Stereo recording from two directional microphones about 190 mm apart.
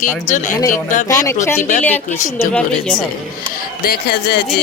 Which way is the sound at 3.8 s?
55° left (ahead or behind).